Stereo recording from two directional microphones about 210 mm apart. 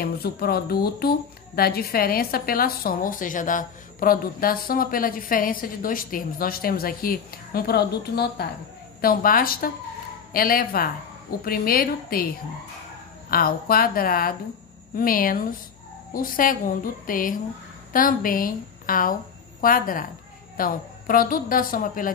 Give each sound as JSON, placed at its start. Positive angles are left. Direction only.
{"t": 0.0, "sound": "speech", "side_deg": 45}
{"t": 13.3, "sound": "a woman's voice", "side_deg": 45}